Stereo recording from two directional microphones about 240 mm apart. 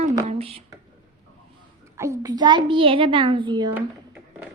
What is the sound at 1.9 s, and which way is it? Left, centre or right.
A child's voice, centre.